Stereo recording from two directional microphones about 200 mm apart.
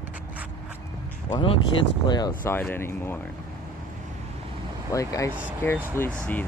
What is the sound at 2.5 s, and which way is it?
Speech, 10° left (ahead or behind).